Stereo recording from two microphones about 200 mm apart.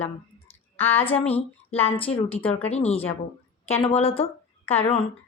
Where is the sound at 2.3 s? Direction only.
5° left (ahead or behind).